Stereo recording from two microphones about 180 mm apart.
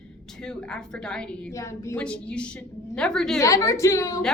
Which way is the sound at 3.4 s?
15° left (ahead or behind).